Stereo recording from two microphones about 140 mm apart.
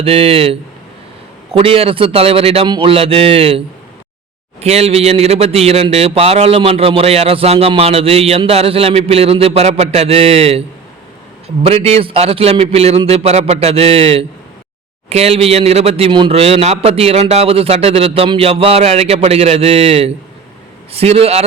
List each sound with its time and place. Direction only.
0.0 s a man's voice: 45° right (ahead or behind)
4.6 s a man's voice: 50° right (ahead or behind)